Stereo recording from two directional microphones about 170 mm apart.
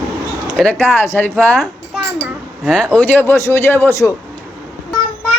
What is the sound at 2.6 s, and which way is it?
Speech, 5° left (ahead or behind).